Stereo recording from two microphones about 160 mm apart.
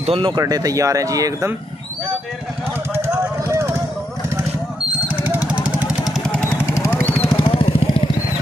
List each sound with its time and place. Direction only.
0.0 s speech: 35° right (ahead or behind)
2.9 s vehicle: 15° right (ahead or behind)
5.0 s vehicle: 10° right (ahead or behind); by 7.2 s 10° left (ahead or behind)
7.2 s vehicle: 35° left (ahead or behind)